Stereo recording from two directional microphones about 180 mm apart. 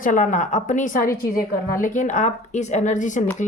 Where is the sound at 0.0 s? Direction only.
45° left (ahead or behind).